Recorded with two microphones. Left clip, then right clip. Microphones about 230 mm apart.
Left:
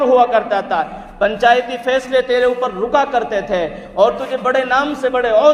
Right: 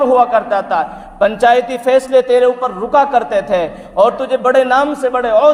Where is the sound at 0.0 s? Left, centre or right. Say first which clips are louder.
Right 1 dB; right.